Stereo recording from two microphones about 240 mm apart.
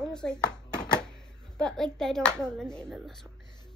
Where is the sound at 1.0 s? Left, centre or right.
Centre.